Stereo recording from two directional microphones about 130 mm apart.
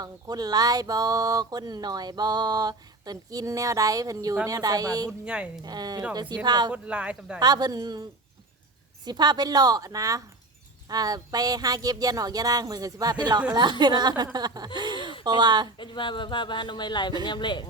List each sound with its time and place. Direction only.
0.0 s a sound: 30° right (ahead or behind)
5.2 s speech: 10° right (ahead or behind)
5.6 s a woman's voice: 30° right (ahead or behind)
6.7 s speech: 10° right (ahead or behind)
7.3 s a woman's voice: 30° right (ahead or behind)
9.0 s a sound: 35° right (ahead or behind)
13.5 s a woman's voice: 30° right (ahead or behind)
15.8 s speech: 40° left (ahead or behind)